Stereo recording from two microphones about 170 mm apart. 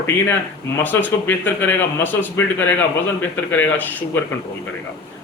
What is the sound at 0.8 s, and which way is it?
A man's voice, 10° left (ahead or behind).